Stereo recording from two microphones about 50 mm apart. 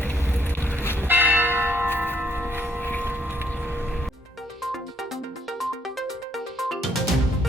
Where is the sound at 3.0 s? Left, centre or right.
Right.